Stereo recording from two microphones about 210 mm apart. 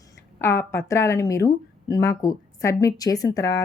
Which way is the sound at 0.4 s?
10° left (ahead or behind).